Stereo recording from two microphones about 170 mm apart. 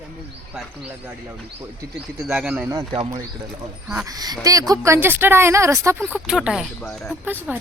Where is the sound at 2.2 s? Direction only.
10° right (ahead or behind).